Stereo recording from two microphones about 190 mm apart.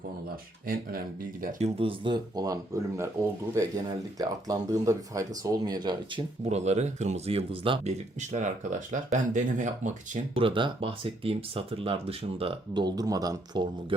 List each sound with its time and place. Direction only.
0.7 s speech: 50° right (ahead or behind)
1.6 s speech: 30° right (ahead or behind)
6.4 s speech: 35° right (ahead or behind)
10.3 s speech: 25° right (ahead or behind)